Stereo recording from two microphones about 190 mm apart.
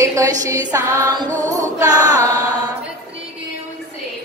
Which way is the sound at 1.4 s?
20° right (ahead or behind).